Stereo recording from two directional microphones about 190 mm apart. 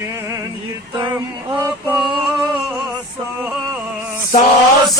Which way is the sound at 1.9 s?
20° right (ahead or behind).